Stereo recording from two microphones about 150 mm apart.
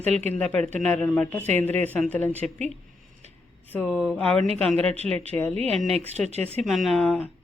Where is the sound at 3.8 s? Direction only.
5° right (ahead or behind).